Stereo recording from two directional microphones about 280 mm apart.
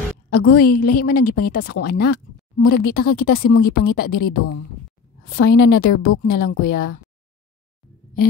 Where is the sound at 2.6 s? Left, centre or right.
Left.